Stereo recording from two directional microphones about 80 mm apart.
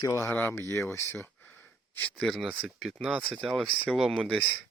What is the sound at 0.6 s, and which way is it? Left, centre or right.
Speech, left.